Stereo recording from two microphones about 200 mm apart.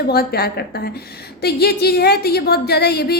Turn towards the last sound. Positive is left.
turn(degrees=55)  # may be behind; listen again after turning